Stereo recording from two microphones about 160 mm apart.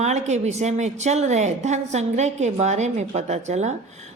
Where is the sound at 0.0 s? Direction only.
45° right (ahead or behind).